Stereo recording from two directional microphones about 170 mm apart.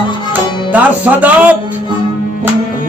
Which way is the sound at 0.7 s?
10° right (ahead or behind).